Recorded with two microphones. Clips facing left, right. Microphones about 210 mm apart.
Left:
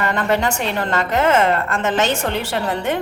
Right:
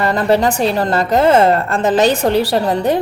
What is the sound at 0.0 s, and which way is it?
A woman's voice, 35° right (ahead or behind).